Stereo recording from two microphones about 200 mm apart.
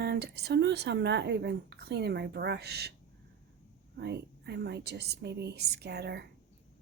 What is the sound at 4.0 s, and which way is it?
Speech, 55° right (ahead or behind).